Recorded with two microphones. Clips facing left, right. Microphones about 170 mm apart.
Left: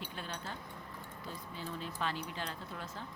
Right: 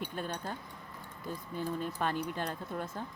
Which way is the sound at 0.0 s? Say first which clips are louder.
Right 6 dB; 50° right (ahead or behind).